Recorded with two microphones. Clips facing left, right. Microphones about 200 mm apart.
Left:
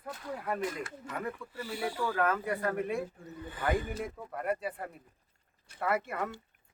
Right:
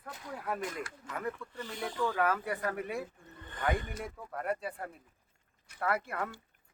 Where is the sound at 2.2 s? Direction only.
5° right (ahead or behind).